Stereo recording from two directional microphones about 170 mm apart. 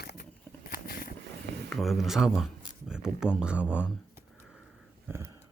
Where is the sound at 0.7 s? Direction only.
55° left (ahead or behind).